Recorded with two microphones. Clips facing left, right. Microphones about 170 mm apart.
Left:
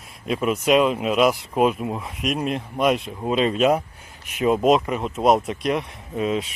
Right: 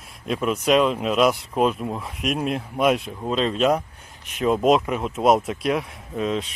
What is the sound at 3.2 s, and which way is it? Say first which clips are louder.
Speech: left 2 dB; 10° left (ahead or behind).